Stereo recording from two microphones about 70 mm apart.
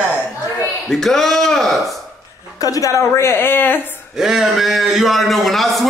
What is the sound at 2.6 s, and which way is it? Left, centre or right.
A woman's voice, left.